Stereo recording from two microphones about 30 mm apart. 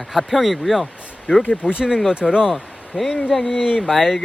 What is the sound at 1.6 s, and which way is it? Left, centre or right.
Speech, right.